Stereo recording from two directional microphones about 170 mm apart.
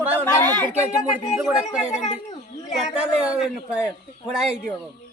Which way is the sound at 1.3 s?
Centre (ahead or behind).